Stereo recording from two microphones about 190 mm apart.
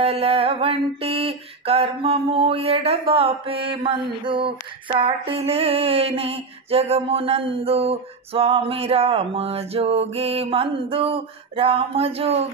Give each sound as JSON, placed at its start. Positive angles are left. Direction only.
{"t": 0.0, "sound": "music", "side_deg": -30}